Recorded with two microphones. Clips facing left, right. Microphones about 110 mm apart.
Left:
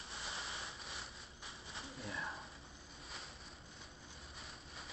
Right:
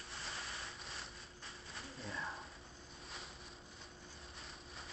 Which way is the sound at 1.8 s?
Centre (ahead or behind).